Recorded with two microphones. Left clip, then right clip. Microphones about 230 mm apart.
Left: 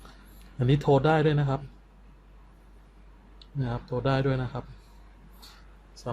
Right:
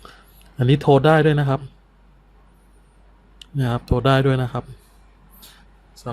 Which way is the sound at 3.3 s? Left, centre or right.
Right.